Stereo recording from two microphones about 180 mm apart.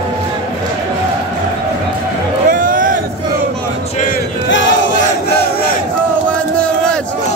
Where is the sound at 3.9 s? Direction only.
50° left (ahead or behind).